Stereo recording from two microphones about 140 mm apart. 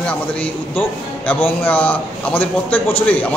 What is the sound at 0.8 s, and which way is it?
A man's voice, 15° left (ahead or behind).